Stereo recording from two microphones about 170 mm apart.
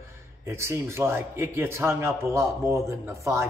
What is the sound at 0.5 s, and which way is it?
A man's voice, 15° right (ahead or behind).